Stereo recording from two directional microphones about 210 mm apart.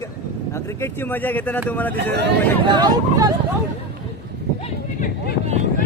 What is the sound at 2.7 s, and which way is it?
Speech, 20° right (ahead or behind).